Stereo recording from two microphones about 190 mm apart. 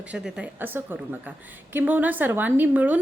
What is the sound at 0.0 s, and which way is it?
A woman's voice, 5° right (ahead or behind).